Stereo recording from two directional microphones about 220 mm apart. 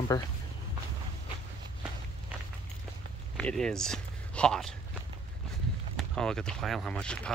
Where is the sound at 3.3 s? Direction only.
Centre (ahead or behind).